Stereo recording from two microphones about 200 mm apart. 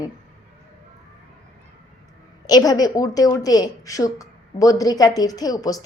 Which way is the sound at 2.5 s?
20° left (ahead or behind).